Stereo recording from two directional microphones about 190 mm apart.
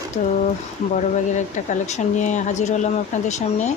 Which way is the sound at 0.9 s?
40° left (ahead or behind).